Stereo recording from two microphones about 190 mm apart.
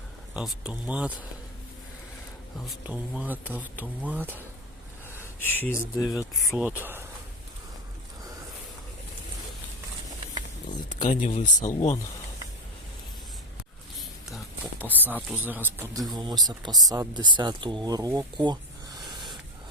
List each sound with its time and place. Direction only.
0.3 s speech: 5° right (ahead or behind)
2.8 s speech: 5° right (ahead or behind)
5.4 s speech: 10° left (ahead or behind)
6.6 s speech: 10° right (ahead or behind)
11.1 s speech: 45° left (ahead or behind)
14.3 s speech: 10° right (ahead or behind)
19.0 s a sound: 25° right (ahead or behind)